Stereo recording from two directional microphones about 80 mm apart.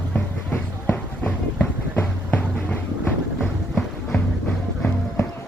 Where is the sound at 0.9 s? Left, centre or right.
Left.